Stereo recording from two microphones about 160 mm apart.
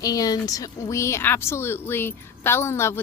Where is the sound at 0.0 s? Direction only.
25° left (ahead or behind).